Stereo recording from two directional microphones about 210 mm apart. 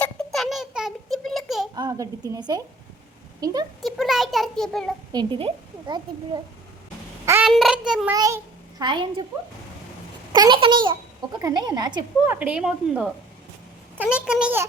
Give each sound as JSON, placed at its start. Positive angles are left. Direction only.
{"t": 0.0, "sound": "a sound", "side_deg": 0}
{"t": 1.7, "sound": "speech", "side_deg": -15}
{"t": 3.8, "sound": "a child's voice", "side_deg": 0}
{"t": 5.1, "sound": "speech", "side_deg": -25}
{"t": 7.4, "sound": "a child's voice", "side_deg": 0}
{"t": 8.1, "sound": "a child's voice", "side_deg": -15}
{"t": 10.3, "sound": "speech", "side_deg": -20}
{"t": 12.2, "sound": "a child's voice", "side_deg": -10}